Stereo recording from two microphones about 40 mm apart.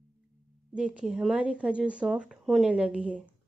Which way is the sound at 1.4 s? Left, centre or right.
Right.